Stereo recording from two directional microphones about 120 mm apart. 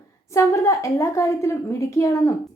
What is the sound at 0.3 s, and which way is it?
A woman's voice, 25° left (ahead or behind).